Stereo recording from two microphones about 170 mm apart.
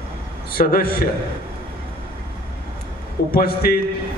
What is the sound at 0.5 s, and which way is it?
Speech, 60° left (ahead or behind).